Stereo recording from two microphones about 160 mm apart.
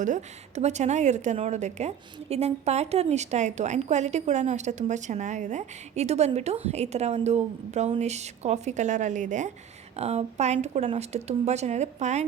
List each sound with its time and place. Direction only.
0.0 s a woman's voice: 50° right (ahead or behind)